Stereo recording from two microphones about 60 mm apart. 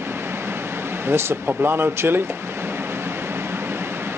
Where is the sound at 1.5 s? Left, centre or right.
Right.